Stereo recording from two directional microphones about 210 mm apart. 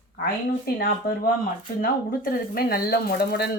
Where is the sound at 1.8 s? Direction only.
45° left (ahead or behind).